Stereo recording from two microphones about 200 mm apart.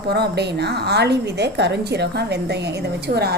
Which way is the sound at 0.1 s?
55° right (ahead or behind).